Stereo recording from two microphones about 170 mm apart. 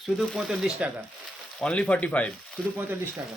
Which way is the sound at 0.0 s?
Centre (ahead or behind).